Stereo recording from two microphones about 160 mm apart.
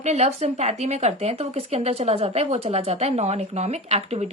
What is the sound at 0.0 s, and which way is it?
A woman's voice, 45° right (ahead or behind).